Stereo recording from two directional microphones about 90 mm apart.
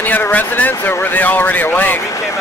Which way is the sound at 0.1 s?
20° left (ahead or behind).